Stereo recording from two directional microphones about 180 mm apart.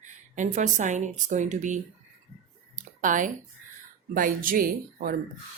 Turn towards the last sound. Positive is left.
turn(degrees=-50)  # may be behind; listen again after turning